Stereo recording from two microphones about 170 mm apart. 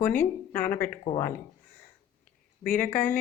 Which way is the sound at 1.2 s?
55° left (ahead or behind).